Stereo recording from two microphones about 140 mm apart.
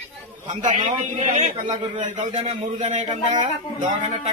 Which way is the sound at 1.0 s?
55° right (ahead or behind).